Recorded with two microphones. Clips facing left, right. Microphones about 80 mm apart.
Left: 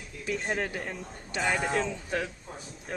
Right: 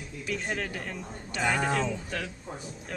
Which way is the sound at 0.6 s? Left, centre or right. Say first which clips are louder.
Left 2 dB; centre.